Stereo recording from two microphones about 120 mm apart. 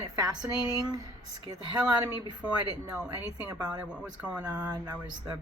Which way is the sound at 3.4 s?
35° right (ahead or behind).